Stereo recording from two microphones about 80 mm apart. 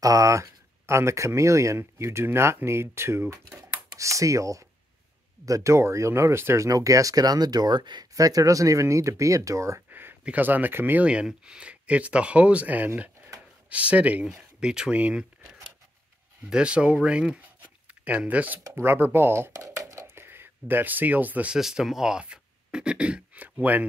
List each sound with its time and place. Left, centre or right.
0.0 s speech: right
8.1 s speech: right
9.8 s a sound: right
10.2 s speech: right
11.1 s speech: centre
21.5 s speech: centre; by 23.9 s right